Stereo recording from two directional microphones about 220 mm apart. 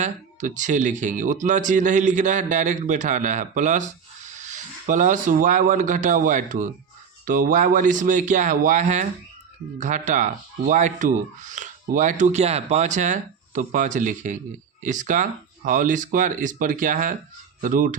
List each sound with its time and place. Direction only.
0.0 s speech: 35° right (ahead or behind)